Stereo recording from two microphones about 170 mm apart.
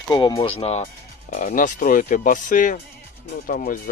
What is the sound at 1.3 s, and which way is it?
Speech, 50° left (ahead or behind).